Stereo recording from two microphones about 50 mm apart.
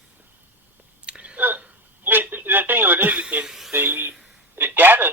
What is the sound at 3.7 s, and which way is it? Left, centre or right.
Speech, right.